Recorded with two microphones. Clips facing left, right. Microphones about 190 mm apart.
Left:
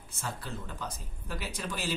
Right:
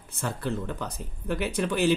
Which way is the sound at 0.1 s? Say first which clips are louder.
Right 9 dB; 60° right (ahead or behind).